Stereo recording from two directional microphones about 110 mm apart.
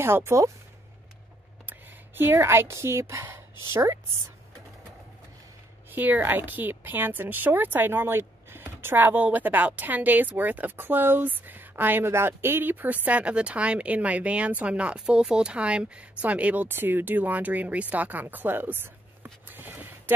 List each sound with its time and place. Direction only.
0.0 s speech: 25° right (ahead or behind)
1.7 s speech: 20° right (ahead or behind)
5.9 s a woman's voice: 15° right (ahead or behind)